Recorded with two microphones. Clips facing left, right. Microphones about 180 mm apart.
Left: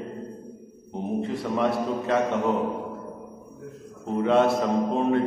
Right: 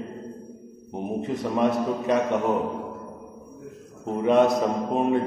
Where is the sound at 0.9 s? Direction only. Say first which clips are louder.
Even; 20° right (ahead or behind).